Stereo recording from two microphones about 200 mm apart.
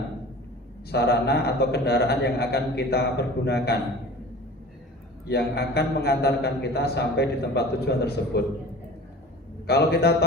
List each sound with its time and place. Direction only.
0.9 s a man's voice: 55° left (ahead or behind)
5.3 s a man's voice: 55° left (ahead or behind)
9.6 s a man's voice: 55° left (ahead or behind)